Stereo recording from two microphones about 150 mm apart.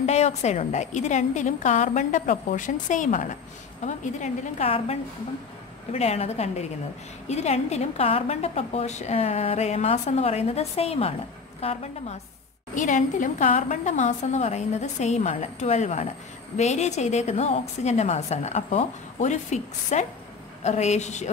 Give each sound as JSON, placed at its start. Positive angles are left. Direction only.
{"t": 0.0, "sound": "a woman's voice", "side_deg": 45}
{"t": 5.9, "sound": "a woman's voice", "side_deg": 45}
{"t": 12.7, "sound": "a woman's voice", "side_deg": 60}